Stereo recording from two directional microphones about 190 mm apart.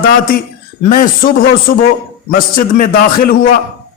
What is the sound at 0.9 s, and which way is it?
A man's voice, 50° left (ahead or behind).